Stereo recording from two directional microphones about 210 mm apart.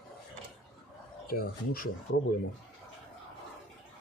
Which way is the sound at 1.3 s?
45° left (ahead or behind).